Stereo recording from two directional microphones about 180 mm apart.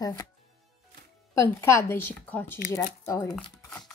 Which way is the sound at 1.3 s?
15° left (ahead or behind).